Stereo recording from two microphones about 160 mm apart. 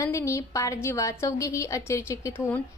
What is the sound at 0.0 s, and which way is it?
A woman's voice, 20° left (ahead or behind).